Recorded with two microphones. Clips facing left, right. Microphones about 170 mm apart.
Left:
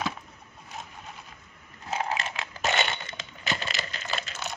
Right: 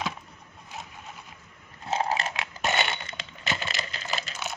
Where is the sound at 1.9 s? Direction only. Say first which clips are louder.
Right 3 dB; 35° right (ahead or behind).